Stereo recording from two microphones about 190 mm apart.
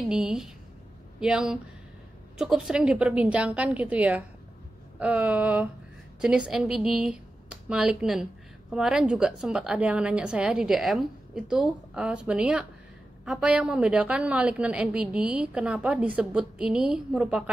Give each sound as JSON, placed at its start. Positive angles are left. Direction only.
{"t": 0.1, "sound": "a woman's voice", "side_deg": -5}